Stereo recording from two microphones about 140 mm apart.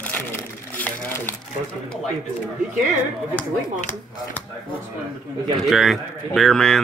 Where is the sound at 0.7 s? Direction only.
10° left (ahead or behind).